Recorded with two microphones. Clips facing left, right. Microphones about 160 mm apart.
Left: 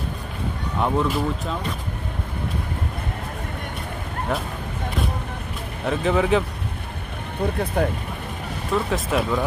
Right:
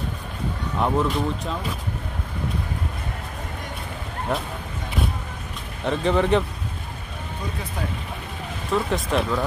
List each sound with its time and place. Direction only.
0.7 s speech: centre (ahead or behind)
5.9 s speech: 5° left (ahead or behind)
7.4 s speech: 60° left (ahead or behind)
8.7 s speech: centre (ahead or behind)